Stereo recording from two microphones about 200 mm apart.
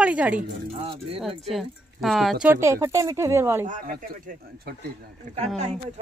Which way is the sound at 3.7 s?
40° right (ahead or behind).